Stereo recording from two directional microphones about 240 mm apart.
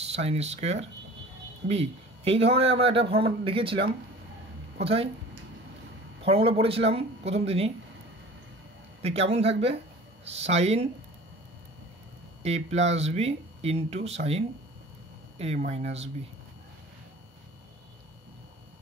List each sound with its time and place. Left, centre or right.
0.1 s speech: right
6.2 s speech: right
9.0 s speech: right
12.4 s speech: right